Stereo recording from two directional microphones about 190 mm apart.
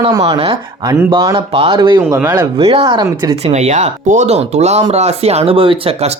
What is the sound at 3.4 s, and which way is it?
Speech, 35° right (ahead or behind).